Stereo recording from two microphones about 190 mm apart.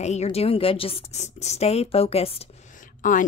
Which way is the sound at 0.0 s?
35° left (ahead or behind).